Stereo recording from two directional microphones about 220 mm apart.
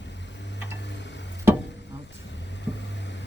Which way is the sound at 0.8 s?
55° left (ahead or behind).